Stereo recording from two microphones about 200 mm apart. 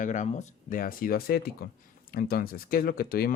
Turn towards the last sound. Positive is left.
turn(degrees=50)  # may be behind; listen again after turning